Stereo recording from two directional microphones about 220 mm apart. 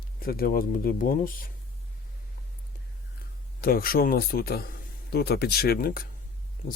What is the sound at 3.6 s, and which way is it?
Speech, 40° left (ahead or behind).